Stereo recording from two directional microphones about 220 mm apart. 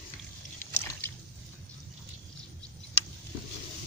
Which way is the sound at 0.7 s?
10° left (ahead or behind).